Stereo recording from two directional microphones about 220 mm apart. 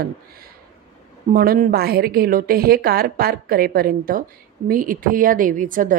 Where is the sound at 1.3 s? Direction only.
40° right (ahead or behind).